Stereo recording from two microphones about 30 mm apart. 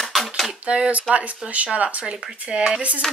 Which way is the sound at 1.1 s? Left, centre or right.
Right.